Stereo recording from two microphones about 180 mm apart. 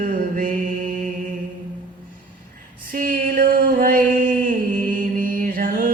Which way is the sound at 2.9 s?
50° right (ahead or behind).